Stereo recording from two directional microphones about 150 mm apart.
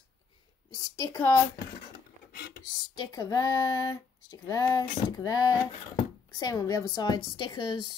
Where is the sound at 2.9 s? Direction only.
30° left (ahead or behind).